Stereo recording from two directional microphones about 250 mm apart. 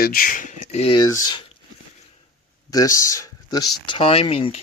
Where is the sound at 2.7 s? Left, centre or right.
Centre.